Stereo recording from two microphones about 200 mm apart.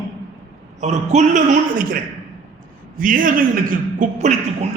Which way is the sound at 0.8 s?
35° right (ahead or behind).